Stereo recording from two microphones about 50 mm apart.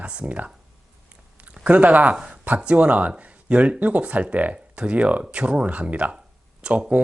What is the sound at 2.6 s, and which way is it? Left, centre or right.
Speech, right.